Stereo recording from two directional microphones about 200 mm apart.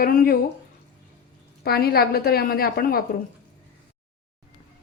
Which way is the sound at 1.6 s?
50° left (ahead or behind).